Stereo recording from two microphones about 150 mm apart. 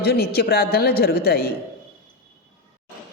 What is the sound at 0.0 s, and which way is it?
Speech, 90° left.